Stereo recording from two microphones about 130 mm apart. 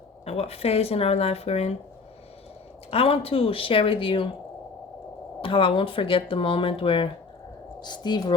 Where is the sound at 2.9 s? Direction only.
45° left (ahead or behind).